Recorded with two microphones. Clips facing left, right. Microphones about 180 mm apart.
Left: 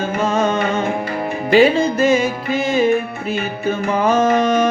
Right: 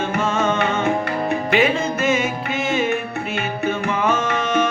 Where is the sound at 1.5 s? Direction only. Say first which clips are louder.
Left 8 dB; 35° left (ahead or behind).